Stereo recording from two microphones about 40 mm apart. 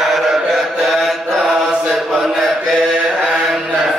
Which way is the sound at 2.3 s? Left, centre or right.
Centre.